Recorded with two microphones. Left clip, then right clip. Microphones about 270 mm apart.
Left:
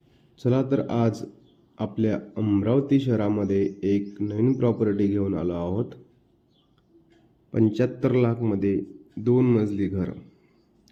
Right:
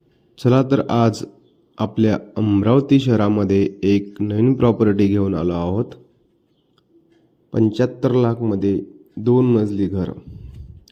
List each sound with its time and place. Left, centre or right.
0.3 s speech: right
7.5 s speech: centre